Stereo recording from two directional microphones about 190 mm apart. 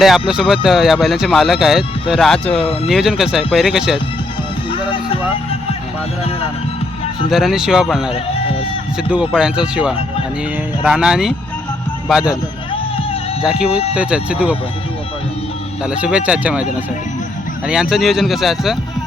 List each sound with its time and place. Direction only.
0.0 s speech: centre (ahead or behind)
4.7 s speech: 25° left (ahead or behind)
7.3 s speech: centre (ahead or behind)
8.1 s speech: 30° left (ahead or behind)
9.0 s speech: 5° right (ahead or behind)
13.4 s speech: 5° right (ahead or behind)
15.8 s speech: 5° right (ahead or behind)
17.7 s speech: 5° right (ahead or behind)